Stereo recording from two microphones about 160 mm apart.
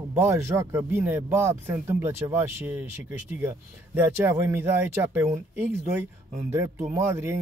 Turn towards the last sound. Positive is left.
turn(degrees=-15)  # may be behind; listen again after turning